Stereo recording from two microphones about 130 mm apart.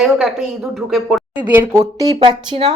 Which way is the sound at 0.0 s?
Centre (ahead or behind).